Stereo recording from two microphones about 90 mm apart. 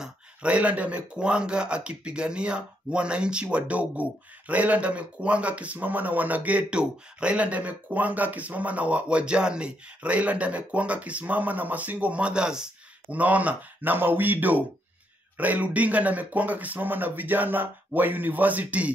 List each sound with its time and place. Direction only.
0.0 s speech: 15° right (ahead or behind)